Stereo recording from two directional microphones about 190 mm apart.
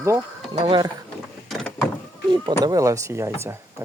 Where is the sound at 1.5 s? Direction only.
Centre (ahead or behind).